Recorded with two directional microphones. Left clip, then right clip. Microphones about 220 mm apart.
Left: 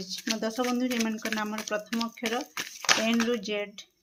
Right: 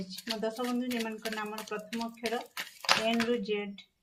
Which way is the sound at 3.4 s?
45° left (ahead or behind).